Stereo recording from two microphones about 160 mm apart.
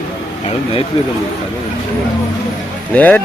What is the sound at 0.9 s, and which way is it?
Speech, 35° left (ahead or behind).